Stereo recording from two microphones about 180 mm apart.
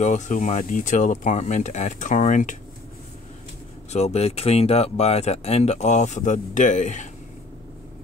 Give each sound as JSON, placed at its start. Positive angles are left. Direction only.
{"t": 0.0, "sound": "speech", "side_deg": 40}
{"t": 3.9, "sound": "speech", "side_deg": 35}